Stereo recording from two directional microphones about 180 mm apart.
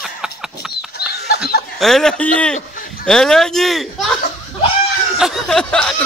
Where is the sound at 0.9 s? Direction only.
65° left (ahead or behind).